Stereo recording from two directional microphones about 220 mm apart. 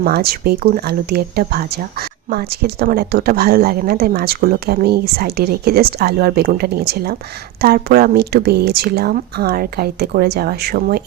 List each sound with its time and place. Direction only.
0.0 s speech: 45° right (ahead or behind)